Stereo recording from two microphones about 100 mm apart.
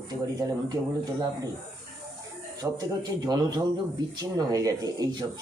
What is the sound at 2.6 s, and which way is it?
Speech, 40° right (ahead or behind).